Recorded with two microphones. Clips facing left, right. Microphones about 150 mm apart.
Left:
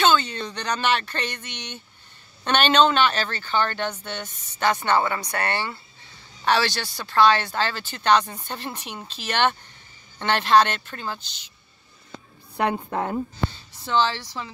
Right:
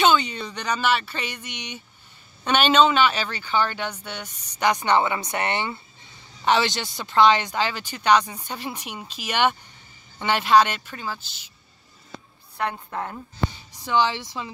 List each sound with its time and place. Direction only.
0.0 s speech: 15° right (ahead or behind)
12.7 s a woman's voice: 25° left (ahead or behind)
13.5 s speech: 15° right (ahead or behind)